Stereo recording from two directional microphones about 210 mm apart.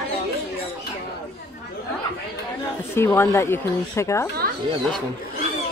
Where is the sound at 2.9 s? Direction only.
10° left (ahead or behind).